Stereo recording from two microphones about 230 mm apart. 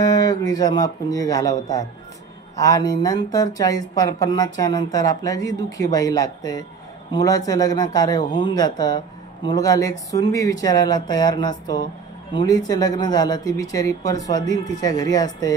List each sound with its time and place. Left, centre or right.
0.0 s a man's voice: centre